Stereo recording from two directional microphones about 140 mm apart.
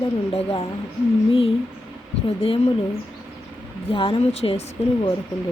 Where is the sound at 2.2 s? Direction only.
40° left (ahead or behind).